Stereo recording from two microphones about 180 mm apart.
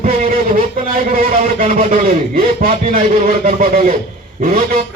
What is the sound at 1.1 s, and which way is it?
A man's voice, 45° right (ahead or behind).